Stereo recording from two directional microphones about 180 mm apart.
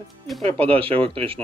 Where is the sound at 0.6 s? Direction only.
30° right (ahead or behind).